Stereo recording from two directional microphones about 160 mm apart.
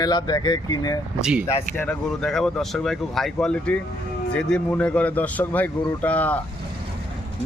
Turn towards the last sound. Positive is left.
turn(degrees=10)  # may be behind; listen again after turning